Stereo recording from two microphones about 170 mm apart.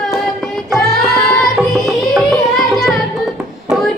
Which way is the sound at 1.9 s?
Centre (ahead or behind).